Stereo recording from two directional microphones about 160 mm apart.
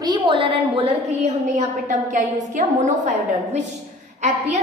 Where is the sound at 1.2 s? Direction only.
50° right (ahead or behind).